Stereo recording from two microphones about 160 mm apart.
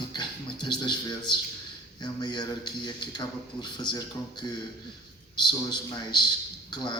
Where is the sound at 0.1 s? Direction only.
30° left (ahead or behind).